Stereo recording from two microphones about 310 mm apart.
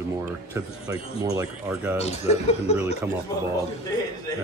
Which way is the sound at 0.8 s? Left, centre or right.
Centre.